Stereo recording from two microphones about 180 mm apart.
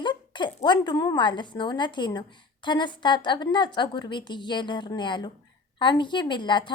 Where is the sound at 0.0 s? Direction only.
25° left (ahead or behind).